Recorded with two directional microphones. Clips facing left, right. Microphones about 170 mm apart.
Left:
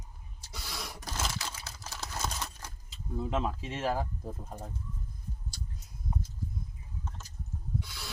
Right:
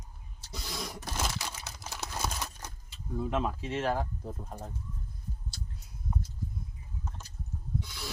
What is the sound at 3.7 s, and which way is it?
Speech, 5° left (ahead or behind).